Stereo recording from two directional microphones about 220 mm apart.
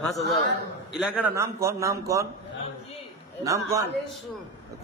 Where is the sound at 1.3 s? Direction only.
15° right (ahead or behind).